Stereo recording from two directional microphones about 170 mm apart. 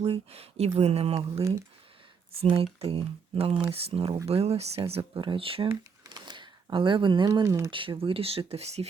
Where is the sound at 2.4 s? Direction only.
35° right (ahead or behind); by 7.7 s 15° right (ahead or behind).